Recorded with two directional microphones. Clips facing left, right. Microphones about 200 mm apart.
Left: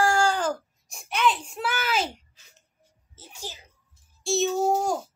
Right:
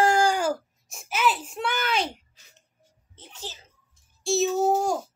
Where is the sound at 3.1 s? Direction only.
10° left (ahead or behind).